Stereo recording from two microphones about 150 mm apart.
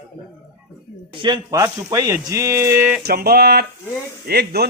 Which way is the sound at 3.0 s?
90° right.